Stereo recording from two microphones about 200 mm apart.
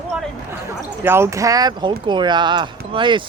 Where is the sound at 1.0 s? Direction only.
10° right (ahead or behind).